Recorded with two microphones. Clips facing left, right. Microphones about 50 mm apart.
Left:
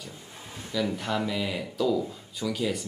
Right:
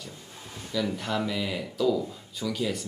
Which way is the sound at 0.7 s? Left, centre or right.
Centre.